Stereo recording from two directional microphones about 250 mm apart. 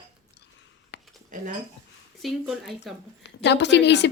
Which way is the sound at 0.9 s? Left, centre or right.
Left.